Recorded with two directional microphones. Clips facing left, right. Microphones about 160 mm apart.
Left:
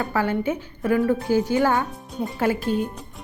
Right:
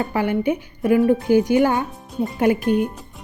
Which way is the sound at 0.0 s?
15° right (ahead or behind).